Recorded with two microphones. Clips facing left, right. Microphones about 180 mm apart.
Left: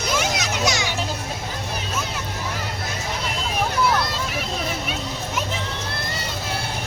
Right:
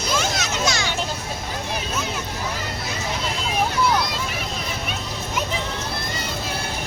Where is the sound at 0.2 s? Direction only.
15° left (ahead or behind).